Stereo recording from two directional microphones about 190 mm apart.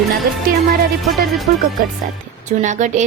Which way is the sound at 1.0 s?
Centre (ahead or behind).